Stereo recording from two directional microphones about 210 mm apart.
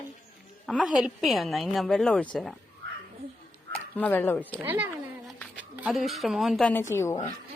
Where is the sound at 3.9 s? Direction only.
10° left (ahead or behind).